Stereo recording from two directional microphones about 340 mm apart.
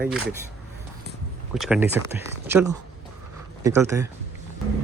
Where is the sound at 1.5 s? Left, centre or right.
Centre.